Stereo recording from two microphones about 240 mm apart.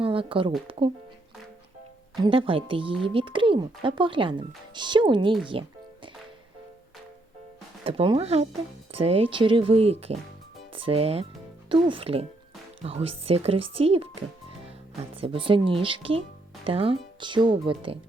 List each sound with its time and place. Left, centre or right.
0.0 s speech: right
2.1 s speech: centre
7.9 s speech: right